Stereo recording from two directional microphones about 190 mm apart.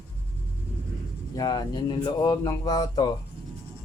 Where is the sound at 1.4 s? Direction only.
20° left (ahead or behind).